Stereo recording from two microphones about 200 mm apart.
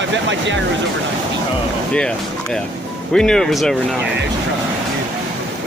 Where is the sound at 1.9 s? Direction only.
5° left (ahead or behind).